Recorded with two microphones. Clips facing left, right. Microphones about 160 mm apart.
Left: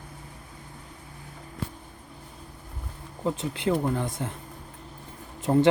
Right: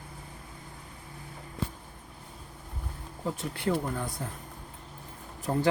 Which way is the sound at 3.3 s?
20° left (ahead or behind).